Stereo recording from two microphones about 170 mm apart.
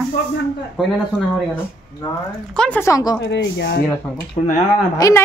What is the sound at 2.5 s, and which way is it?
Speech, 10° left (ahead or behind).